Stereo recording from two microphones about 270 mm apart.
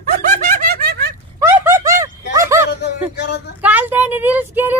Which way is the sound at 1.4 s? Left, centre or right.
Centre.